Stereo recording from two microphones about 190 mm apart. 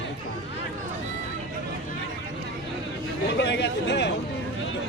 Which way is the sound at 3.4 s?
65° left (ahead or behind).